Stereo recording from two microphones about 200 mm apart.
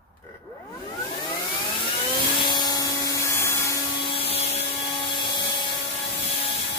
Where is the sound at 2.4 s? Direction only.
20° left (ahead or behind).